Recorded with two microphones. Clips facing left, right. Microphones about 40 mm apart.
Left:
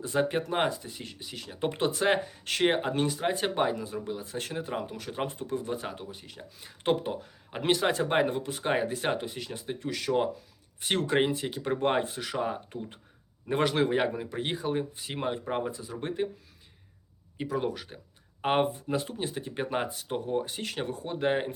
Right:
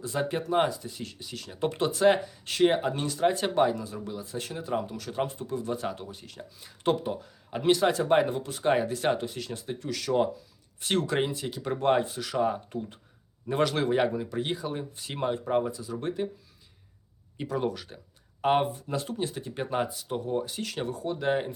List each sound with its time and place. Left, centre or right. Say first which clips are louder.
0.0 s speech: left 2 dB; left
1.9 s speech: right 4 dB; left
4.8 s speech: right 2 dB; left
5.3 s speech: even; left
5.6 s speech: right 2 dB; left
6.6 s speech: right 1 dB; left
13.5 s speech: even; left
14.3 s speech: even; left
14.9 s speech: right 2 dB; centre
15.6 s speech: right 2 dB; left
17.3 s speech: right 1 dB; centre
18.4 s speech: right 1 dB; left